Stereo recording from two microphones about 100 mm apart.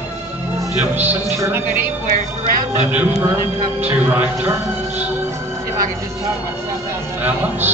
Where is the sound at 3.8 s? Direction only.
15° right (ahead or behind).